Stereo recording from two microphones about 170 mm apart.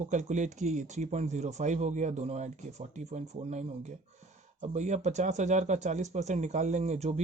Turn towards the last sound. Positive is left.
turn(degrees=-40)  # may be behind; listen again after turning